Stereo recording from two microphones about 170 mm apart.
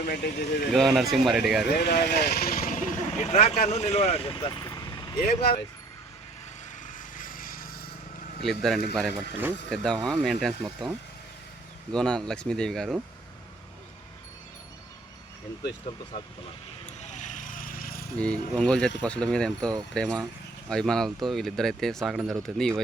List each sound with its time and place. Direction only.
0.0 s speech: 60° left (ahead or behind)
0.7 s speech: centre (ahead or behind)
1.7 s speech: 65° left (ahead or behind); by 5.2 s 20° left (ahead or behind)
5.4 s speech: 70° left (ahead or behind)
6.8 s a sound: 55° left (ahead or behind)
8.4 s speech: centre (ahead or behind)
17.1 s vehicle: 45° left (ahead or behind)
18.2 s speech: 5° left (ahead or behind)